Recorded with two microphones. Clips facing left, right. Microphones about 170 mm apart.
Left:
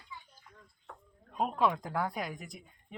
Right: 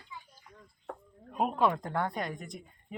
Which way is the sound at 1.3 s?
5° right (ahead or behind).